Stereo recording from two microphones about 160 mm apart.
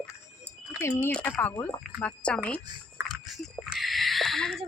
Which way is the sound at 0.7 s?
15° left (ahead or behind).